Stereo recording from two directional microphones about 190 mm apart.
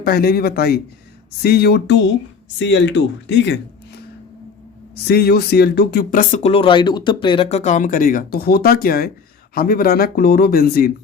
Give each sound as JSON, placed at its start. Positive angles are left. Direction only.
{"t": 0.0, "sound": "speech", "side_deg": 55}
{"t": 5.0, "sound": "speech", "side_deg": 55}